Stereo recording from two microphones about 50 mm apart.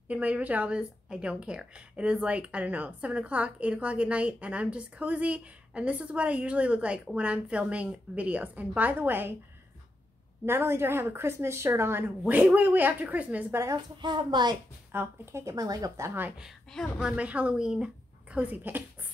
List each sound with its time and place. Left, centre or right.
0.1 s a woman's voice: right
10.4 s a woman's voice: right
12.3 s a woman's voice: right
13.5 s speech: right
14.9 s speech: right
15.3 s a woman's voice: right
16.0 s speech: right
16.7 s speech: centre
17.2 s speech: right
18.4 s a woman's voice: right